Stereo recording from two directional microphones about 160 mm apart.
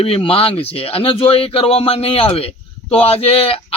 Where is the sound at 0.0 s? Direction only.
35° left (ahead or behind).